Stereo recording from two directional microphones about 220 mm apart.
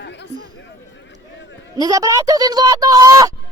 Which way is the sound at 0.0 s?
50° left (ahead or behind).